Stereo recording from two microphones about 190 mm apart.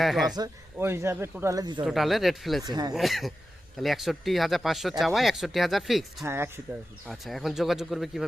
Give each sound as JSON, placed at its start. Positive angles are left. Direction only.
{"t": 0.0, "sound": "speech", "side_deg": 0}
{"t": 0.3, "sound": "speech", "side_deg": -15}
{"t": 1.8, "sound": "speech", "side_deg": 0}
{"t": 2.6, "sound": "speech", "side_deg": -20}
{"t": 2.9, "sound": "speech", "side_deg": 0}
{"t": 6.2, "sound": "speech", "side_deg": -10}
{"t": 7.1, "sound": "speech", "side_deg": 0}